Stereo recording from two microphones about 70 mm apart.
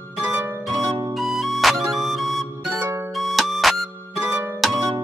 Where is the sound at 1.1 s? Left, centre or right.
Centre.